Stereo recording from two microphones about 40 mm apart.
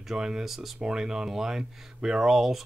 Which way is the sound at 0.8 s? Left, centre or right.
Centre.